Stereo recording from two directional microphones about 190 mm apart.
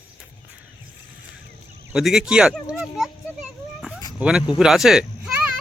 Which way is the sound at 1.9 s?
Centre (ahead or behind).